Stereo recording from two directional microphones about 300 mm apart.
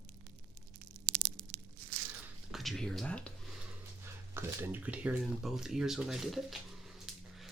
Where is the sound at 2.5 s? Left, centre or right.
Centre.